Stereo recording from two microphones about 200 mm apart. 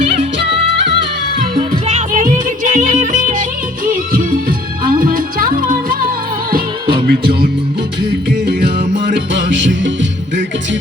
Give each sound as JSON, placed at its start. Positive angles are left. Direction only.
{"t": 0.0, "sound": "music", "side_deg": -30}
{"t": 1.9, "sound": "music", "side_deg": -35}
{"t": 6.9, "sound": "music", "side_deg": -50}